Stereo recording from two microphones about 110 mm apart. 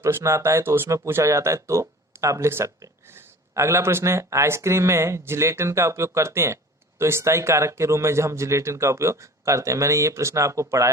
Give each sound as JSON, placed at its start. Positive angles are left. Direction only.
{"t": 0.0, "sound": "speech", "side_deg": -25}